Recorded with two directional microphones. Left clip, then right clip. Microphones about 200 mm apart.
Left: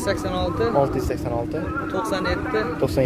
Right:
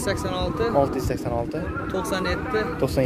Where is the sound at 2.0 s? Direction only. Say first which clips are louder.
Left 1 dB; 50° right (ahead or behind).